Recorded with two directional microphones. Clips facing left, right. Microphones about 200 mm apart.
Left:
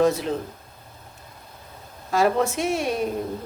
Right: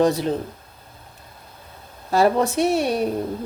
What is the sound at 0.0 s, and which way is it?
Speech, 30° right (ahead or behind).